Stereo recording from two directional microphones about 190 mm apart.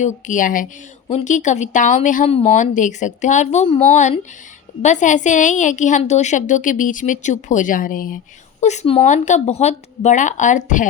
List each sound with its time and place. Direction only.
0.0 s a woman's voice: 40° left (ahead or behind)
8.6 s a woman's voice: 35° left (ahead or behind)